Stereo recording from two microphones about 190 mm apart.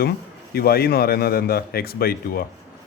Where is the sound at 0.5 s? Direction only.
55° left (ahead or behind).